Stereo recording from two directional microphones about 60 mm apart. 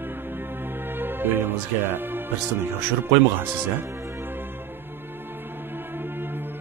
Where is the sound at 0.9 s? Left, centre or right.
Right.